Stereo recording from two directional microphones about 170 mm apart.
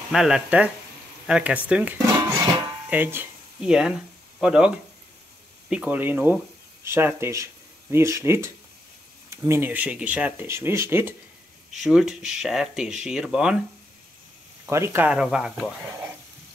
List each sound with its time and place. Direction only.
0.1 s speech: 5° right (ahead or behind)
11.7 s speech: centre (ahead or behind)
14.7 s speech: 15° right (ahead or behind)